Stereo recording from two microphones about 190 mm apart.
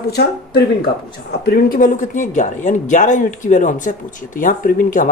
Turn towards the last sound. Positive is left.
turn(degrees=45)  # may be behind; listen again after turning